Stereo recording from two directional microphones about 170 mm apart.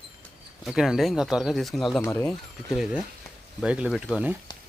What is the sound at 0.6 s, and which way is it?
Speech, 5° right (ahead or behind).